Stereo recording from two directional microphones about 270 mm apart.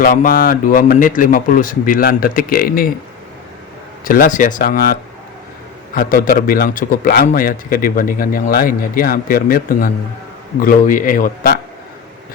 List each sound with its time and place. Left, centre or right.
0.0 s a man's voice: left
4.0 s a man's voice: left
5.9 s a man's voice: left